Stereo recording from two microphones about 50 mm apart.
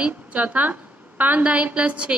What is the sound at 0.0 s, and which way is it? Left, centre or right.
A woman's voice, right.